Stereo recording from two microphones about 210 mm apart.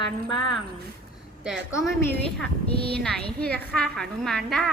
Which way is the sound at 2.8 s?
50° right (ahead or behind).